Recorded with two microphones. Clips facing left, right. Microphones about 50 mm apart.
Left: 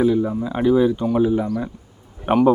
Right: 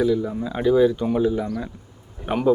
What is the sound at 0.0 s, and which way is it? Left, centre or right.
Speech, left.